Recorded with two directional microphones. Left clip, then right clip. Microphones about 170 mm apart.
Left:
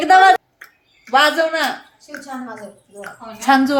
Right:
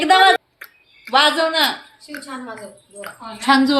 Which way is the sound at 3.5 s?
25° left (ahead or behind).